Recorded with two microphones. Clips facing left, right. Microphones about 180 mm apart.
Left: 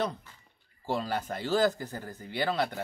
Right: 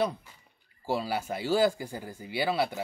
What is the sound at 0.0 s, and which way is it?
Speech, 10° right (ahead or behind).